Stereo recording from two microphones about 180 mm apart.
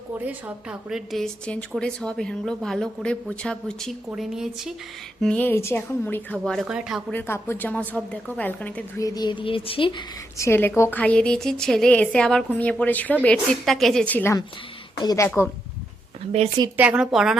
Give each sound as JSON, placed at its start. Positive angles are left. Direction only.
{"t": 0.3, "sound": "a woman's voice", "side_deg": -5}
{"t": 5.2, "sound": "a woman's voice", "side_deg": 10}
{"t": 7.1, "sound": "a woman's voice", "side_deg": 10}
{"t": 10.3, "sound": "a woman's voice", "side_deg": 15}
{"t": 14.9, "sound": "speech", "side_deg": 20}
{"t": 16.7, "sound": "a woman's voice", "side_deg": -10}